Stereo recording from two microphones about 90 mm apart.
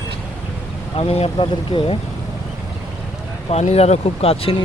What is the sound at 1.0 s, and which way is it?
Speech, 90° left.